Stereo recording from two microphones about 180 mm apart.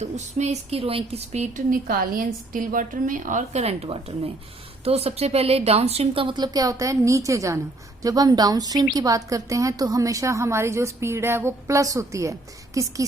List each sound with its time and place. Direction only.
0.0 s a woman's voice: 40° right (ahead or behind); by 13.1 s 20° right (ahead or behind)